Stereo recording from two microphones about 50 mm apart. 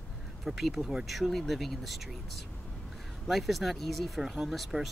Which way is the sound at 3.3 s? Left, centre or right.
Centre.